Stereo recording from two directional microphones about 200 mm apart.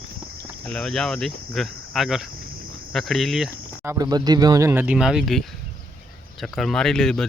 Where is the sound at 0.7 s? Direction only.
5° left (ahead or behind).